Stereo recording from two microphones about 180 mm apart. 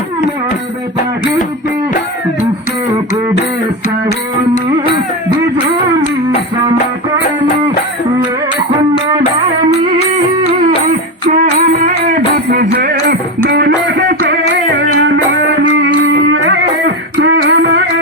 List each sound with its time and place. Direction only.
11.3 s music: 45° right (ahead or behind)
12.1 s music: 55° right (ahead or behind); by 15.9 s 80° right
16.3 s music: 90° right